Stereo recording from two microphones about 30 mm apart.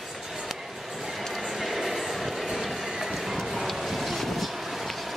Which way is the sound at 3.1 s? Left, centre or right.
Centre.